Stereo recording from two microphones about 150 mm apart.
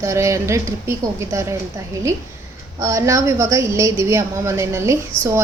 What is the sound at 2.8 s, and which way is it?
A woman's voice, 20° right (ahead or behind).